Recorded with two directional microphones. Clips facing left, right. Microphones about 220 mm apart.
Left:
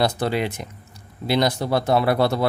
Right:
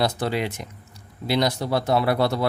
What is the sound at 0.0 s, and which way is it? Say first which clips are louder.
Speech: left 2 dB; 55° left (ahead or behind).